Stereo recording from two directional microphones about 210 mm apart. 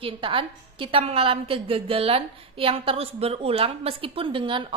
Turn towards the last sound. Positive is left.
turn(degrees=-25)  # may be behind; listen again after turning